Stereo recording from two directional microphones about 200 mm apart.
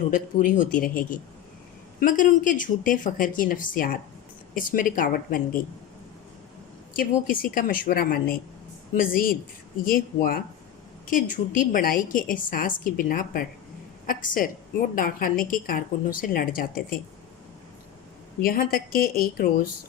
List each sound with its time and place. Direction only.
0.1 s a man's voice: 40° left (ahead or behind)
6.9 s a woman's voice: 45° left (ahead or behind)
18.4 s a woman's voice: 45° left (ahead or behind)